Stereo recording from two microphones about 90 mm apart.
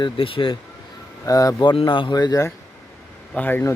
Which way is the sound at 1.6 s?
60° left (ahead or behind).